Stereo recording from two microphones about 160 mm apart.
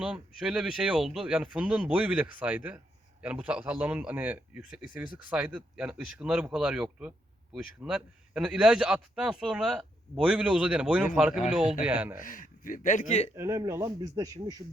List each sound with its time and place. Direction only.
0.0 s a man's voice: 5° right (ahead or behind)
12.2 s speech: 55° left (ahead or behind)
13.3 s speech: 20° right (ahead or behind)